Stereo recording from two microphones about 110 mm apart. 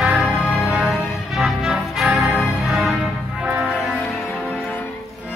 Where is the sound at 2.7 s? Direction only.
Centre (ahead or behind).